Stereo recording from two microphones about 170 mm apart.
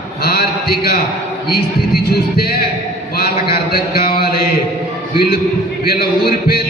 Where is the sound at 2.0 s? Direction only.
65° left (ahead or behind).